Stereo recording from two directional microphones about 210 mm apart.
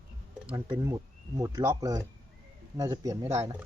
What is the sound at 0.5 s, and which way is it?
Speech, 15° right (ahead or behind).